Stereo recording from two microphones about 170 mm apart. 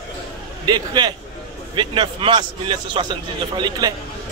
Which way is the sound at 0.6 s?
25° right (ahead or behind).